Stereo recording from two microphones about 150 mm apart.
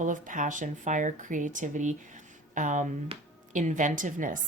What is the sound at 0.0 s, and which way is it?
A woman's voice, 60° right (ahead or behind).